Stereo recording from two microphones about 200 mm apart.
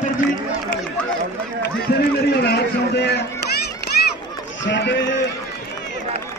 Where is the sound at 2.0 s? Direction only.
55° left (ahead or behind).